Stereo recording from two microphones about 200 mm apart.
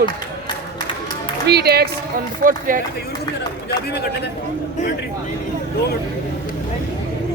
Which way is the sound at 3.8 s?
55° left (ahead or behind).